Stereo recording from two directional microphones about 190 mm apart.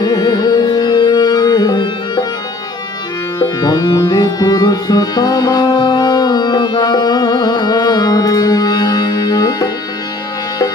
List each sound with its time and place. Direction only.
0.0 s music: 20° left (ahead or behind)
3.3 s music: 20° left (ahead or behind)